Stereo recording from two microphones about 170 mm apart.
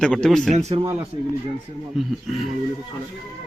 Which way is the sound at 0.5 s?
40° right (ahead or behind).